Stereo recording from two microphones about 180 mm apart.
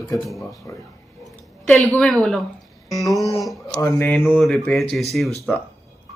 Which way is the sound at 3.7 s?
10° left (ahead or behind).